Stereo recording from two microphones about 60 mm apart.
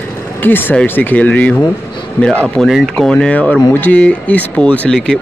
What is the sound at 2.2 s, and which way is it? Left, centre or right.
Speech, left.